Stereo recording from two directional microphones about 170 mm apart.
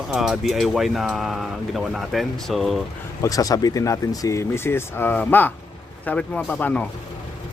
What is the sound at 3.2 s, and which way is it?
Speech, 20° left (ahead or behind).